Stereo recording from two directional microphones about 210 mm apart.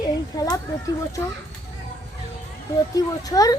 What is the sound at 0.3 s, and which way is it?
Speech, 15° left (ahead or behind).